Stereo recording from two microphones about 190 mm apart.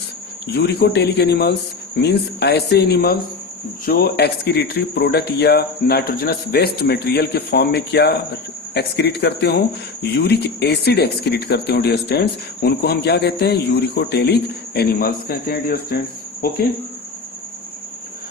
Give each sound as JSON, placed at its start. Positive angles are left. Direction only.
{"t": 0.4, "sound": "speech", "side_deg": 60}